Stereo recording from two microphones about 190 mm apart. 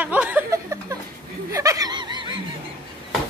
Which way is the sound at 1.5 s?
20° right (ahead or behind).